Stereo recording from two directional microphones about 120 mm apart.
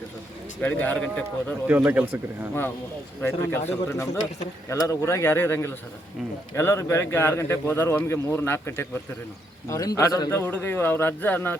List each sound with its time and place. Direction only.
0.6 s speech: 15° left (ahead or behind)
1.6 s speech: 15° right (ahead or behind)
3.2 s speech: 20° left (ahead or behind)
10.3 s speech: 20° left (ahead or behind)